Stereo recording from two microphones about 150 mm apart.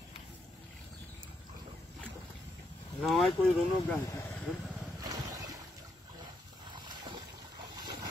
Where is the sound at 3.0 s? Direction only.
Centre (ahead or behind).